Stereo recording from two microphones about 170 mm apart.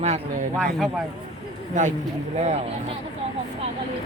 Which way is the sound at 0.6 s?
Centre (ahead or behind).